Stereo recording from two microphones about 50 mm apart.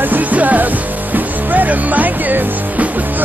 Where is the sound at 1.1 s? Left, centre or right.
Right.